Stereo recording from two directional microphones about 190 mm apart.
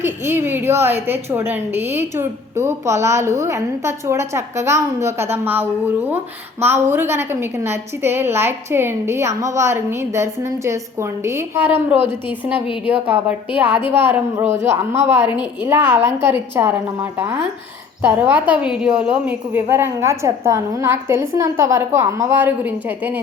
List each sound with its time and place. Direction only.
0.0 s a woman's voice: 10° right (ahead or behind)
12.6 s a woman's voice: 25° left (ahead or behind)
12.9 s a woman's voice: 10° right (ahead or behind)